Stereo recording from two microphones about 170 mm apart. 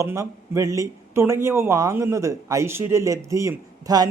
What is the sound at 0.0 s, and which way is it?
A man's voice, 15° right (ahead or behind).